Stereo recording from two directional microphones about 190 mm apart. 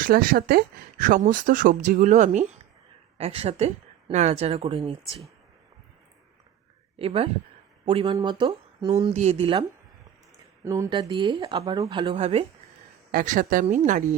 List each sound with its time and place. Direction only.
0.0 s speech: 45° right (ahead or behind); by 5.2 s 30° right (ahead or behind)
7.0 s speech: 30° right (ahead or behind)
10.6 s speech: 15° right (ahead or behind); by 12.5 s 35° right (ahead or behind)
13.1 s speech: 45° right (ahead or behind)